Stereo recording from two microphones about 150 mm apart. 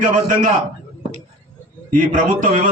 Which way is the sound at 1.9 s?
60° right (ahead or behind).